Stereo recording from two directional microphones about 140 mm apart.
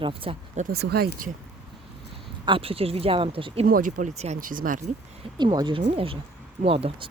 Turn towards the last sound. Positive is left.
turn(degrees=-40)  # may be behind; listen again after turning